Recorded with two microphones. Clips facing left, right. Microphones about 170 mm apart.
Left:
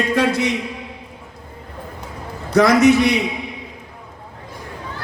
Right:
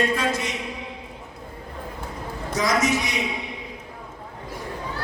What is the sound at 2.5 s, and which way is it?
Speech, 65° left (ahead or behind).